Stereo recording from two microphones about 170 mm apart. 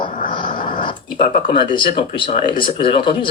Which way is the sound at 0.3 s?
30° left (ahead or behind).